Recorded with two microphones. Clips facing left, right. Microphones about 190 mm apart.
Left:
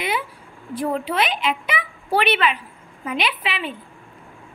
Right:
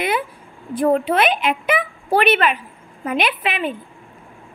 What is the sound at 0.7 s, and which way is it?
A woman's voice, 55° right (ahead or behind).